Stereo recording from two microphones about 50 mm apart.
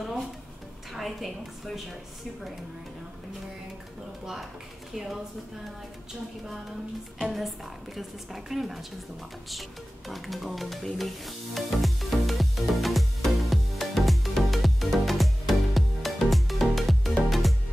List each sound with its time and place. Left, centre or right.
0.9 s a woman's voice: centre
4.9 s a woman's voice: centre
7.2 s a woman's voice: centre
9.5 s stir: centre
17.3 s music: centre